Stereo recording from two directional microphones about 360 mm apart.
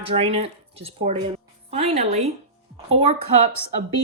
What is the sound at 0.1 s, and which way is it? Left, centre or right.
A woman's voice, centre.